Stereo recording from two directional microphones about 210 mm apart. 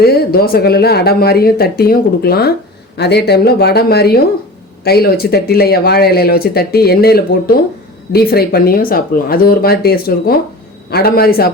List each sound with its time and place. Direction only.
0.0 s speech: 45° left (ahead or behind)